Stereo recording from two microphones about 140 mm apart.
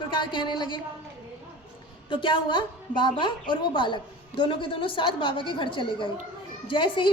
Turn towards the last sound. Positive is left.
turn(degrees=35)  # may be behind; listen again after turning